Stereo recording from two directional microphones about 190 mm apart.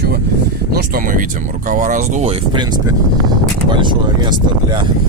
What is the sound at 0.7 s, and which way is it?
Speech, 45° right (ahead or behind).